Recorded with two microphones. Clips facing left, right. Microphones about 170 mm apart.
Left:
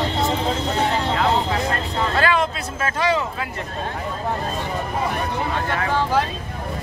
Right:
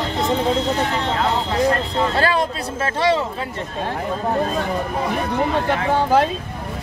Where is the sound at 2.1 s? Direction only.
35° right (ahead or behind).